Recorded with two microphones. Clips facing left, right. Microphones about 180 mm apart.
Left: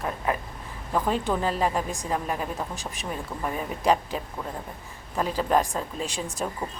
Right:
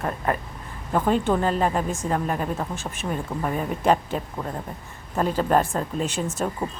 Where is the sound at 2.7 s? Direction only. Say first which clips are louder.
Right 4 dB; 35° left (ahead or behind).